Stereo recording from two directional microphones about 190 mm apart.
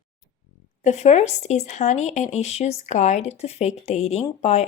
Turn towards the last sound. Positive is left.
turn(degrees=35)  # may be behind; listen again after turning